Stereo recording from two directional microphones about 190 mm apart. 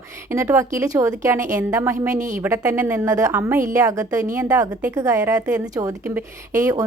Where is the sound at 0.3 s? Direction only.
15° right (ahead or behind).